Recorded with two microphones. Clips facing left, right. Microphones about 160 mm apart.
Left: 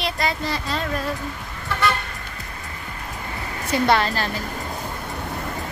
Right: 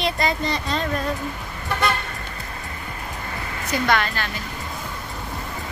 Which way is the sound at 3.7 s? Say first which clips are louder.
Left 3 dB; 30° left (ahead or behind).